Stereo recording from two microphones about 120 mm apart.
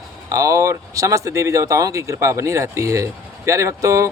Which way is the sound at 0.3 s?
25° right (ahead or behind).